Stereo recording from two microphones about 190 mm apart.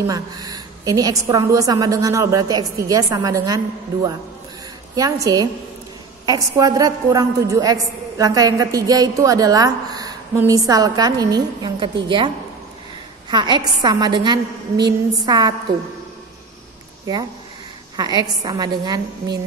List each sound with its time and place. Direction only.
0.0 s a woman's voice: 20° right (ahead or behind)
13.3 s a woman's voice: 25° right (ahead or behind)
17.0 s a woman's voice: 20° right (ahead or behind)